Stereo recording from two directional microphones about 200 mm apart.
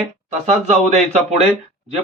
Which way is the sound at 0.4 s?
35° right (ahead or behind).